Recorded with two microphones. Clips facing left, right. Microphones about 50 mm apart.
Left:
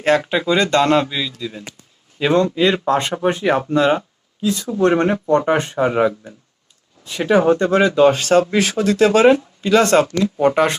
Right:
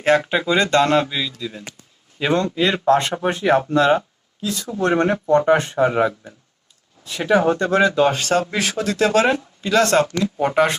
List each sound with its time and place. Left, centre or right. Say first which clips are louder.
0.0 s speech: left 1 dB; centre
0.8 s speech: left 1 dB; centre
10.3 s speech: left 2 dB; centre